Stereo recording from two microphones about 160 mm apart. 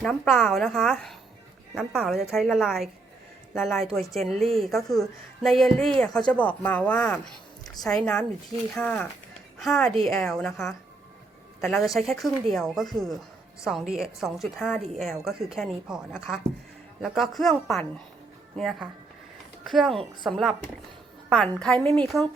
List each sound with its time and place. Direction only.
0.0 s a woman's voice: 5° left (ahead or behind)